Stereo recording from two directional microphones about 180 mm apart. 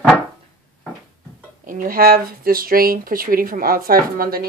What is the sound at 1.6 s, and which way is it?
Speech, 50° right (ahead or behind).